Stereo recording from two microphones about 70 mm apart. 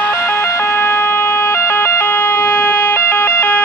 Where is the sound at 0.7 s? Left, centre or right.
Left.